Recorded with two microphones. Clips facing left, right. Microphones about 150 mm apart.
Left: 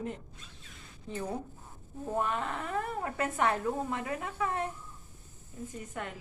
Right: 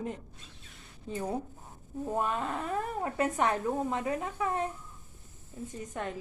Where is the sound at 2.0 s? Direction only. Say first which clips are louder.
Right 1 dB; 15° right (ahead or behind).